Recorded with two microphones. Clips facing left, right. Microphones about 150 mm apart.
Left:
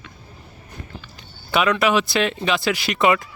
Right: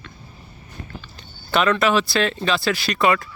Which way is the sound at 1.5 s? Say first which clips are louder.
Even; 10° left (ahead or behind).